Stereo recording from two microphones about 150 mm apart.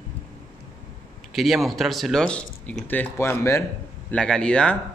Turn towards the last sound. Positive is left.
turn(degrees=5)  # may be behind; listen again after turning